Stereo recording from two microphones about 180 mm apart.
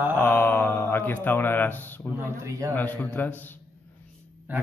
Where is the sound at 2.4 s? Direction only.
15° right (ahead or behind).